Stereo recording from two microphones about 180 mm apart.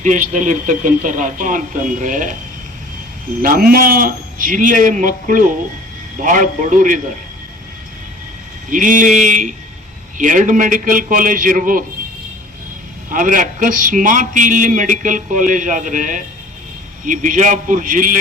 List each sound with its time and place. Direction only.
0.0 s a man's voice: 45° right (ahead or behind)
3.4 s a man's voice: 50° right (ahead or behind)
8.7 s a man's voice: 45° right (ahead or behind)
13.1 s a man's voice: 45° right (ahead or behind)